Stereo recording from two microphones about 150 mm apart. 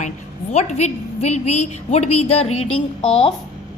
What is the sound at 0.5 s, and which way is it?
A woman's voice, 50° left (ahead or behind).